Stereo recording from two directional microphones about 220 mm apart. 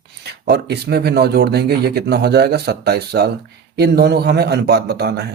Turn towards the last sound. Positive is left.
turn(degrees=-50)  # may be behind; listen again after turning